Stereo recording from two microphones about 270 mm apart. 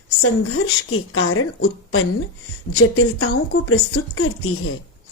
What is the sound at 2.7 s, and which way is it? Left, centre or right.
A woman's voice, left.